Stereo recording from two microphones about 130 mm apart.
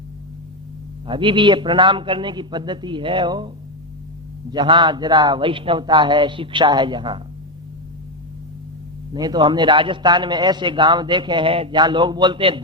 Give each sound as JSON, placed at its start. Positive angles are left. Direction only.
{"t": 1.0, "sound": "a man's voice", "side_deg": -40}
{"t": 4.5, "sound": "a man's voice", "side_deg": -35}
{"t": 9.1, "sound": "a man's voice", "side_deg": -30}